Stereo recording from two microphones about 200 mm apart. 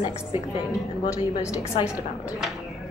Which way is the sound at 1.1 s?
15° left (ahead or behind).